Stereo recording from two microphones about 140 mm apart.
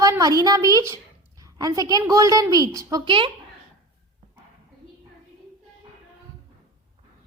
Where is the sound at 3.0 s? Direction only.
40° right (ahead or behind).